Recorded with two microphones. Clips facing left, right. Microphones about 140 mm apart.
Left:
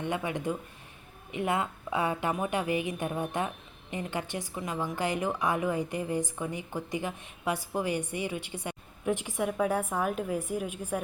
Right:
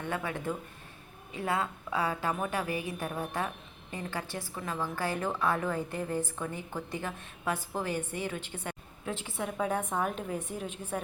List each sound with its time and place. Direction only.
0.0 s a woman's voice: 15° left (ahead or behind)